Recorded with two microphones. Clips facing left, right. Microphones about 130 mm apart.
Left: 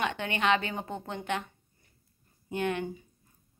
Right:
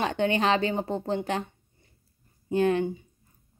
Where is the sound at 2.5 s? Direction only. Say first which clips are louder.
Right 8 dB; 30° right (ahead or behind).